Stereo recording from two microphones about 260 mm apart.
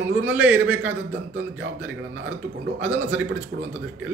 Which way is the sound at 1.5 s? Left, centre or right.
Right.